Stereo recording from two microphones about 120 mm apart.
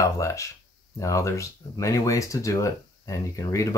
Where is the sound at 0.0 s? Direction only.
25° left (ahead or behind).